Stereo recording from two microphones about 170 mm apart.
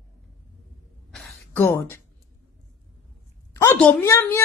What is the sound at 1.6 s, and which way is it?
Speech, 15° left (ahead or behind).